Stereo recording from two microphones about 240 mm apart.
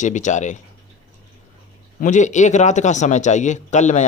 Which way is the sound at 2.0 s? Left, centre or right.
Left.